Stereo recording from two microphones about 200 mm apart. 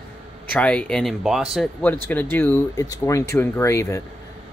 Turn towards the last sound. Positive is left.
turn(degrees=15)  # may be behind; listen again after turning